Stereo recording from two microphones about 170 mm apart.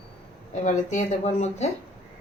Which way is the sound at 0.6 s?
45° left (ahead or behind).